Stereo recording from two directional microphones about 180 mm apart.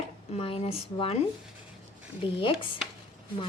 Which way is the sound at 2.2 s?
30° left (ahead or behind).